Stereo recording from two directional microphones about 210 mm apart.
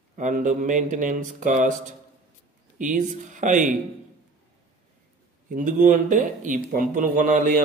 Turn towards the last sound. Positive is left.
turn(degrees=-35)  # may be behind; listen again after turning